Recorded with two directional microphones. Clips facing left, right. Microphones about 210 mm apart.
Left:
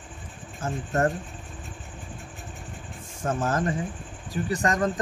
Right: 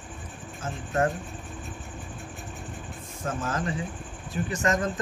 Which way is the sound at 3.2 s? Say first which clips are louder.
Left 4 dB; 45° left (ahead or behind).